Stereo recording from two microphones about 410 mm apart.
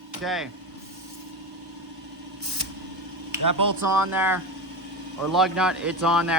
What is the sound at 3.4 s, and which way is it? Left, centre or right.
Speech, right.